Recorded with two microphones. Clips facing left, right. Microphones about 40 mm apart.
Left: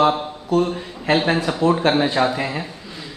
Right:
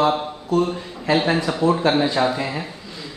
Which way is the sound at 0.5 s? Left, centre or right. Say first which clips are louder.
Left 1 dB; left.